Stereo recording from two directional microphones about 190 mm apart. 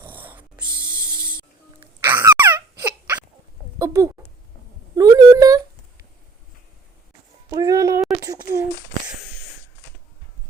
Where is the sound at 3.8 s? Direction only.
15° right (ahead or behind).